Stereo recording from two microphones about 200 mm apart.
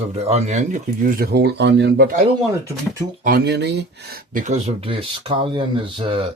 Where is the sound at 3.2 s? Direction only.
50° right (ahead or behind).